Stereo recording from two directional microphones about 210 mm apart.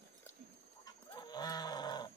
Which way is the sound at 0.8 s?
20° left (ahead or behind).